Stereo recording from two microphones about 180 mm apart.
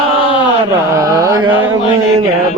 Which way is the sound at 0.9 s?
20° right (ahead or behind).